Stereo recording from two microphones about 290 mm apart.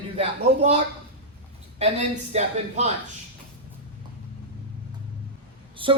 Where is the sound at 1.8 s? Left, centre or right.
Right.